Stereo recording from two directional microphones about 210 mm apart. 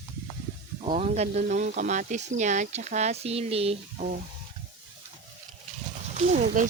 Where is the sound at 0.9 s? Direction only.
30° right (ahead or behind).